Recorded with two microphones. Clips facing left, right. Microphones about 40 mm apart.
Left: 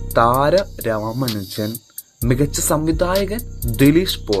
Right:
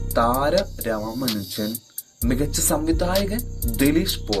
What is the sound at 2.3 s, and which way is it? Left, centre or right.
Speech, left.